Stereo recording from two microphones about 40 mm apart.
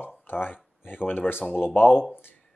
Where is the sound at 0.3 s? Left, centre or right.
Left.